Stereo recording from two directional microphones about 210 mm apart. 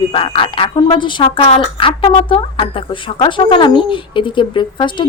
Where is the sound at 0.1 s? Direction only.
25° left (ahead or behind).